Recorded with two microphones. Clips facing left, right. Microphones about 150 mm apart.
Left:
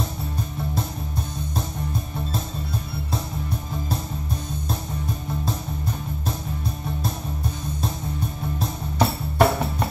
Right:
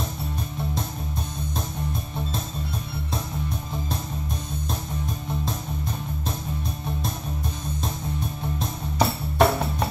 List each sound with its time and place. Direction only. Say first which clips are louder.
8.5 s music: left 1 dB; 5° left (ahead or behind)